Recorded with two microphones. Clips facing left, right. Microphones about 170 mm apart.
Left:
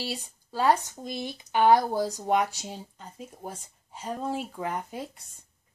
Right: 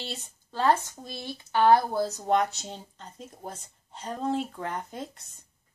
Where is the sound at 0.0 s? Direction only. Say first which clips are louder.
Left 4 dB; 10° left (ahead or behind).